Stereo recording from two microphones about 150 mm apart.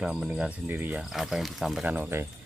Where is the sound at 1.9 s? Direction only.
15° right (ahead or behind).